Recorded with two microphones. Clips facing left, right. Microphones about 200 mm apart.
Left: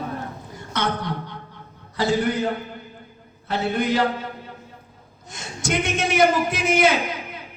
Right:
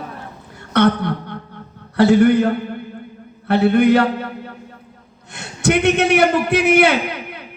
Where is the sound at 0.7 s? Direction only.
60° right (ahead or behind).